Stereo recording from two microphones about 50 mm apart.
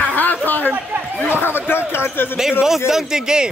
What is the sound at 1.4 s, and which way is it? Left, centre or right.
Speech, left.